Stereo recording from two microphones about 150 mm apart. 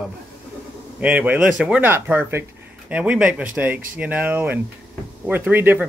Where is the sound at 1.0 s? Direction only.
10° right (ahead or behind).